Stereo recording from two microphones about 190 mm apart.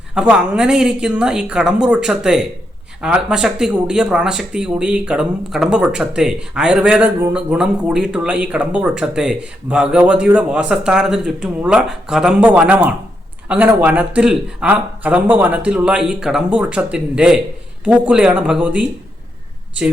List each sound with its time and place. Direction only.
0.1 s speech: 5° right (ahead or behind)